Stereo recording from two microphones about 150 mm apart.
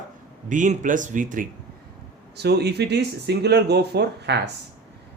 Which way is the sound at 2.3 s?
90° right.